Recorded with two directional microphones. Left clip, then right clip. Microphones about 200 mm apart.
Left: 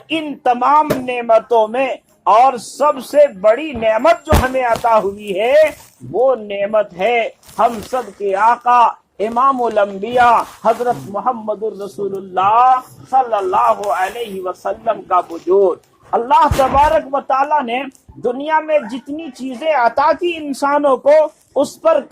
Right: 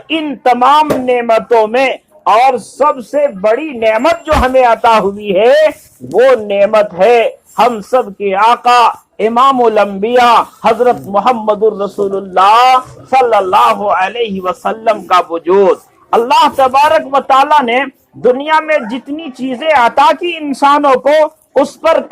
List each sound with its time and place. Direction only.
0.1 s speech: 30° right (ahead or behind)